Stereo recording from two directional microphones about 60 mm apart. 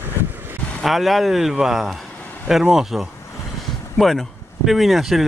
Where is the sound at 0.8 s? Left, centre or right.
Centre.